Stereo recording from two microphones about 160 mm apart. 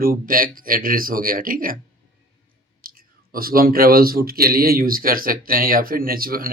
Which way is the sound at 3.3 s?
65° right (ahead or behind).